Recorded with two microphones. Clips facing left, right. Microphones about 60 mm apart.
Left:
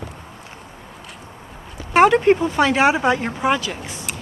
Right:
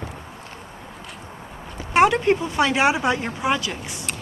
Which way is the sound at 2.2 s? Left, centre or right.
Left.